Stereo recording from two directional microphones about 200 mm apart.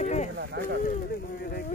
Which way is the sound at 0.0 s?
35° left (ahead or behind).